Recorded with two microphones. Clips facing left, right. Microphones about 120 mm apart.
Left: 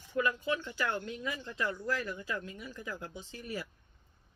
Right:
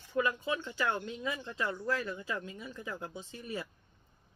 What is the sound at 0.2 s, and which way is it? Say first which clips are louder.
Speech: even; 25° right (ahead or behind).